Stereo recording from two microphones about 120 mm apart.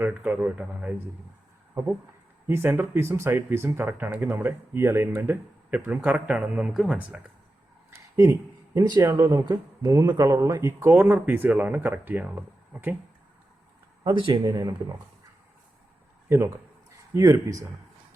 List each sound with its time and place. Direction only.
0.0 s speech: 10° right (ahead or behind)
2.5 s speech: 20° right (ahead or behind)
7.9 s a sound: 25° right (ahead or behind)
8.9 s speech: 25° right (ahead or behind)
14.0 s speech: 40° right (ahead or behind)
17.2 s speech: 25° right (ahead or behind)